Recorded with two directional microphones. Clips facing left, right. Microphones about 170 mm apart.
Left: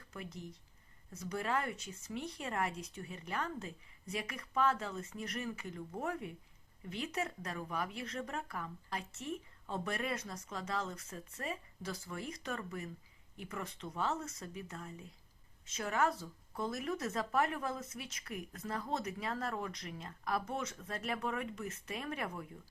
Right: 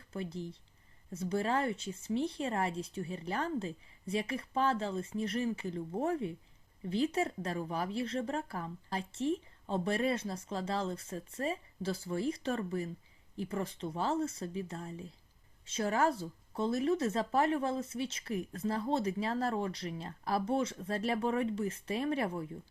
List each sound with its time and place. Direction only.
0.1 s speech: 30° right (ahead or behind)